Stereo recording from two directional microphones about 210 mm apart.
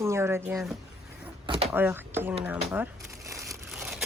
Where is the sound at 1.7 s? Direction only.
10° right (ahead or behind).